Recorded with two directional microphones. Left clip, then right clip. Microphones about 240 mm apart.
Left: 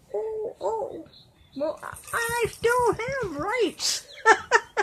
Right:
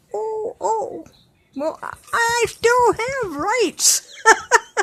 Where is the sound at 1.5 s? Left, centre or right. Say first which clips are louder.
Right 5 dB; right.